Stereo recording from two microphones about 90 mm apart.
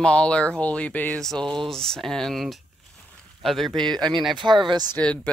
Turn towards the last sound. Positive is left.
turn(degrees=15)  # may be behind; listen again after turning